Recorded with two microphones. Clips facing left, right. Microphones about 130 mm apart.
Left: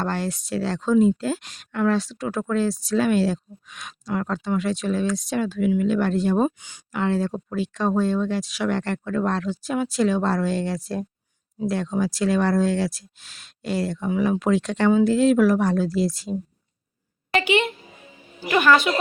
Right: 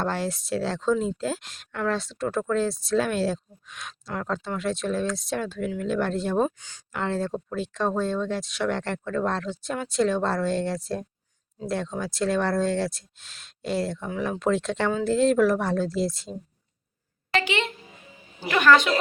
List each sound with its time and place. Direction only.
0.0 s speech: centre (ahead or behind)
6.6 s a woman's voice: 15° left (ahead or behind)
6.9 s speech: centre (ahead or behind)
17.3 s a woman's voice: 15° left (ahead or behind)